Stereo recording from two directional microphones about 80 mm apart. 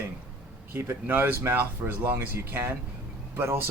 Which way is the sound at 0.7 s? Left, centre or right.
Right.